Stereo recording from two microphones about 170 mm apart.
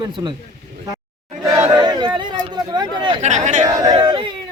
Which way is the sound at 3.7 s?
20° right (ahead or behind).